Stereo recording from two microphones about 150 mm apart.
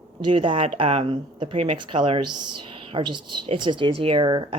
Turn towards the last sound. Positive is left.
turn(degrees=-30)  # may be behind; listen again after turning